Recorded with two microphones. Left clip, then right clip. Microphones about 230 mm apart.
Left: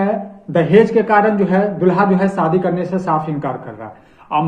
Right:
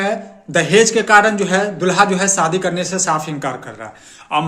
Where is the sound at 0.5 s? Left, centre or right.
Right.